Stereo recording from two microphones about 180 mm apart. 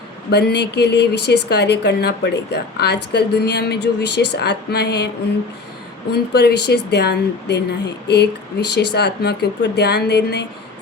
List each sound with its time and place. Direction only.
0.3 s speech: 65° left (ahead or behind)
6.1 s speech: 70° left (ahead or behind)